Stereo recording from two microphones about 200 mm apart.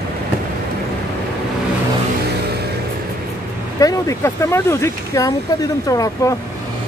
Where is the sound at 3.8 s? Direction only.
15° left (ahead or behind).